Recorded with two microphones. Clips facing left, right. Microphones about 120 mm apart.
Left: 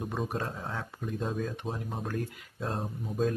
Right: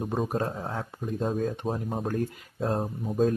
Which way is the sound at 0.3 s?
35° right (ahead or behind).